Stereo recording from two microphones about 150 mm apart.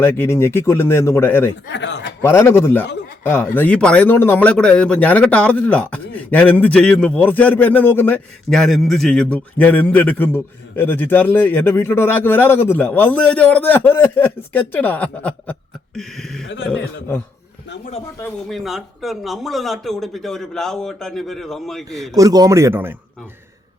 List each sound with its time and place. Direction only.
0.0 s a man's voice: 15° left (ahead or behind)
18.4 s speech: centre (ahead or behind)
22.1 s speech: 25° right (ahead or behind)